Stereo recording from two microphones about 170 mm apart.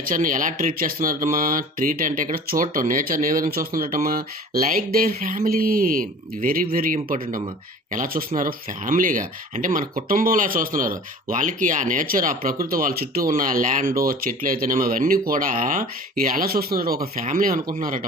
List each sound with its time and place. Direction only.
0.0 s speech: 50° right (ahead or behind)